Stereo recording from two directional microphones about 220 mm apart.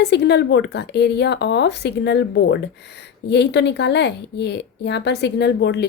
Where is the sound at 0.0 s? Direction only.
50° left (ahead or behind).